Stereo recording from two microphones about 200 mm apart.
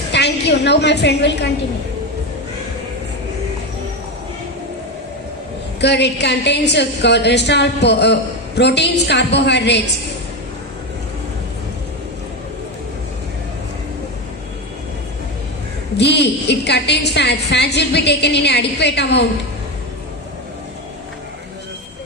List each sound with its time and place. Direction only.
0.1 s a woman's voice: 60° left (ahead or behind)
5.8 s a woman's voice: 60° left (ahead or behind)
16.0 s a woman's voice: 60° left (ahead or behind)